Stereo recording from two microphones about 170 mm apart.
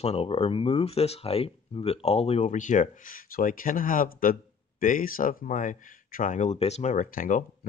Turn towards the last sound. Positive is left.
turn(degrees=50)  # may be behind; listen again after turning